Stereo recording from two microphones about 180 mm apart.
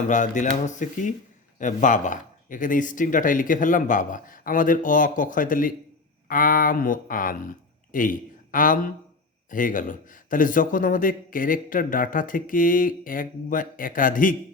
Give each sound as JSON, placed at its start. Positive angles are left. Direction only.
{"t": 0.1, "sound": "a man's voice", "side_deg": 45}